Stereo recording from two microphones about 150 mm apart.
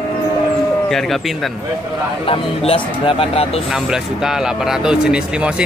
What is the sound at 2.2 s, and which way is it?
Speech, 40° left (ahead or behind).